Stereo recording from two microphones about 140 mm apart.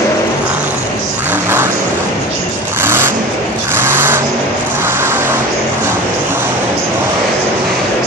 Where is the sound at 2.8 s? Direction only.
15° right (ahead or behind).